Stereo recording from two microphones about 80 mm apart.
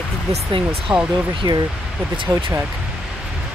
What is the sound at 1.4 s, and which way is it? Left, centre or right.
Speech, right.